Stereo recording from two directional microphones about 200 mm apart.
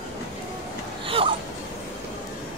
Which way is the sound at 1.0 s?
25° right (ahead or behind).